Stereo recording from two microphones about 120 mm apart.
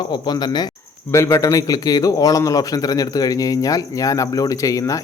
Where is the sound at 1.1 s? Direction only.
25° left (ahead or behind).